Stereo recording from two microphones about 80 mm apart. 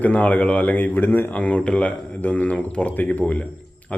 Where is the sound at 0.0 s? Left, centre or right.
Centre.